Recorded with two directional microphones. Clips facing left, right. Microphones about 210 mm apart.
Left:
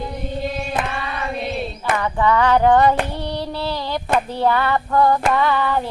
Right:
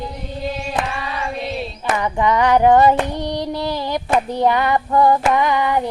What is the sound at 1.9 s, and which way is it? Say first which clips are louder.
Female singing: even; 15° right (ahead or behind).